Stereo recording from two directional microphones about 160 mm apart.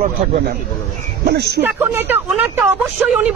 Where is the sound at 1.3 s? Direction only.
90° right.